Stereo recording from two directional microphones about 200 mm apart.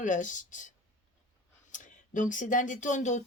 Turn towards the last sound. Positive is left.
turn(degrees=40)  # may be behind; listen again after turning